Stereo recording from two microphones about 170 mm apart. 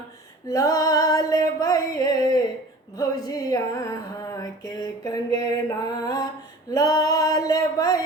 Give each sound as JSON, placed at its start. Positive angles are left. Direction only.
{"t": 0.4, "sound": "female singing", "side_deg": 20}
{"t": 3.0, "sound": "music", "side_deg": 20}
{"t": 6.7, "sound": "a sound", "side_deg": 20}